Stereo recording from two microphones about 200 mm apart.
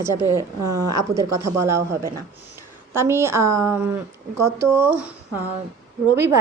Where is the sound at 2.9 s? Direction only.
15° right (ahead or behind).